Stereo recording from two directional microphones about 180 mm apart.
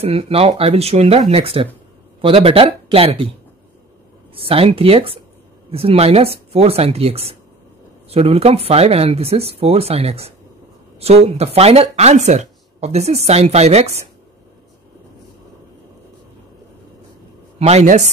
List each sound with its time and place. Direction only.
0.0 s speech: 35° right (ahead or behind)
4.4 s speech: 30° right (ahead or behind)
17.6 s speech: 35° right (ahead or behind)